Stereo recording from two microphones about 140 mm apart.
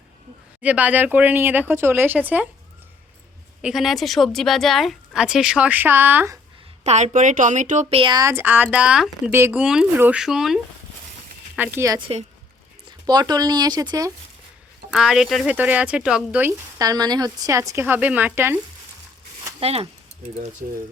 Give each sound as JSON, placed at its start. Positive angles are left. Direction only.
{"t": 0.6, "sound": "speech", "side_deg": -10}
{"t": 3.6, "sound": "speech", "side_deg": -5}
{"t": 6.8, "sound": "speech", "side_deg": -55}
{"t": 7.9, "sound": "speech", "side_deg": -30}
{"t": 8.3, "sound": "speech", "side_deg": -15}
{"t": 11.5, "sound": "speech", "side_deg": -15}
{"t": 11.9, "sound": "a woman's voice", "side_deg": -35}
{"t": 14.8, "sound": "speech", "side_deg": -5}
{"t": 16.7, "sound": "a woman's voice", "side_deg": -25}
{"t": 19.5, "sound": "speech", "side_deg": -45}